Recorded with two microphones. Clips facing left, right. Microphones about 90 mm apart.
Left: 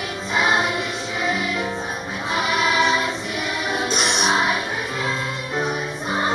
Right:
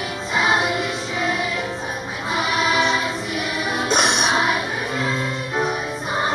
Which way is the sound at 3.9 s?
50° right (ahead or behind).